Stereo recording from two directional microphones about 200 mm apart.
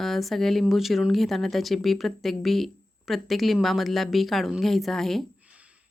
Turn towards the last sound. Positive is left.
turn(degrees=-5)  # may be behind; listen again after turning